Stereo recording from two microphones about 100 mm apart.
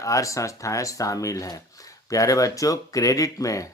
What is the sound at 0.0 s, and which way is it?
Speech, 35° left (ahead or behind).